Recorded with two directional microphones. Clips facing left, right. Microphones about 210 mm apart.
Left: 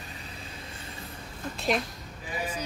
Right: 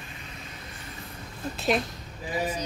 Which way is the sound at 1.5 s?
Centre (ahead or behind).